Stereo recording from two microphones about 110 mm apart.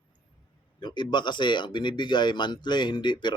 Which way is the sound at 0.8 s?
45° left (ahead or behind).